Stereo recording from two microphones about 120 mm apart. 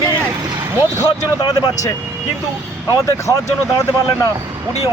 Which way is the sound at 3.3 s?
25° left (ahead or behind).